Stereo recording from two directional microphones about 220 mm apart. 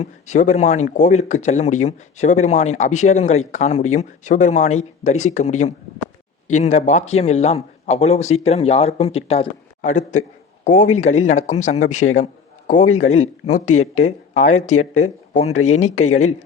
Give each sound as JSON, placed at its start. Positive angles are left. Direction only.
{"t": 0.0, "sound": "a man's voice", "side_deg": 35}